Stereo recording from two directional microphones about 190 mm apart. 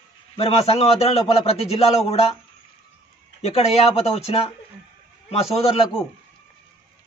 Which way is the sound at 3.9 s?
30° left (ahead or behind).